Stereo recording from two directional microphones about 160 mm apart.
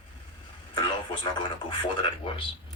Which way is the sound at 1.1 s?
30° left (ahead or behind).